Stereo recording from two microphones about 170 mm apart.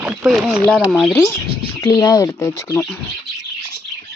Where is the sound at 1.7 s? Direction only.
15° left (ahead or behind).